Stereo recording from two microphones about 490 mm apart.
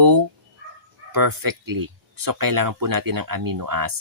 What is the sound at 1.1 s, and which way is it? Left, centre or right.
Speech, right.